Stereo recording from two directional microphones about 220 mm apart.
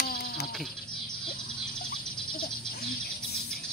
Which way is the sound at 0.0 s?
45° left (ahead or behind).